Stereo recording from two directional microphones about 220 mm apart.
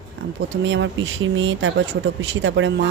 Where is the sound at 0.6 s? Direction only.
55° right (ahead or behind).